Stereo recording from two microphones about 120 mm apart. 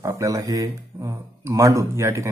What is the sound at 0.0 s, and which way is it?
Speech, 25° right (ahead or behind).